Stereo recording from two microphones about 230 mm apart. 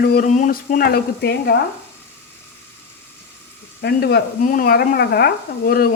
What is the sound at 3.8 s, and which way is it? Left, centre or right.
Speech, left.